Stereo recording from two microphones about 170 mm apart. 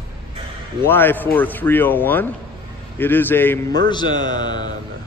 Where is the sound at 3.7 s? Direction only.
25° left (ahead or behind).